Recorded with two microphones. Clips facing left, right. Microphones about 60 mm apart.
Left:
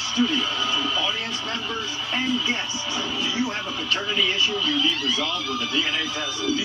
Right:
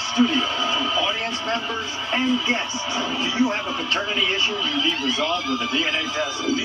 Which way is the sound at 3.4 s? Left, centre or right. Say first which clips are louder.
Right 5 dB; right.